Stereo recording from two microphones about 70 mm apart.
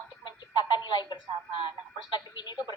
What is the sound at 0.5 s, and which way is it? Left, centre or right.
Speech, left.